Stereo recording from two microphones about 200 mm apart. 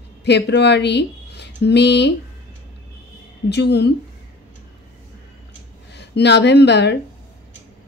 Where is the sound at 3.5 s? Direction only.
55° left (ahead or behind).